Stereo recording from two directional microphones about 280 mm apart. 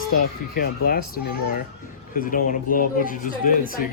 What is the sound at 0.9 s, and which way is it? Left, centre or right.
Speech, left.